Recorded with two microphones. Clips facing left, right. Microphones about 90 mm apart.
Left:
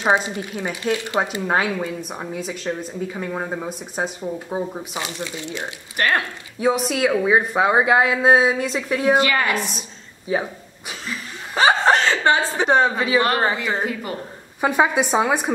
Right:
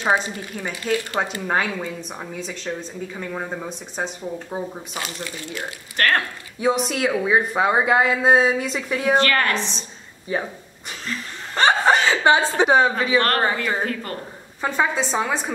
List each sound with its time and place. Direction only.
0.0 s a woman's voice: 20° left (ahead or behind)
6.6 s speech: centre (ahead or behind)
10.9 s laughter: 10° left (ahead or behind)
11.8 s chuckle: 5° right (ahead or behind)
12.3 s a woman's voice: 20° right (ahead or behind)
12.6 s speech: centre (ahead or behind); by 15.5 s 15° left (ahead or behind)